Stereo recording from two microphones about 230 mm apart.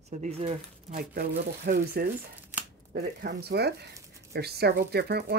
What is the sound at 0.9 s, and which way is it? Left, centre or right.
Speech, right.